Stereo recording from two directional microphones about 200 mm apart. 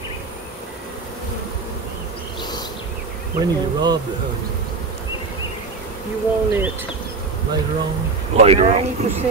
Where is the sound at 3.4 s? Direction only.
20° right (ahead or behind).